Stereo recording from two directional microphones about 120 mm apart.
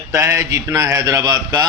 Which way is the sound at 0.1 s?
25° right (ahead or behind).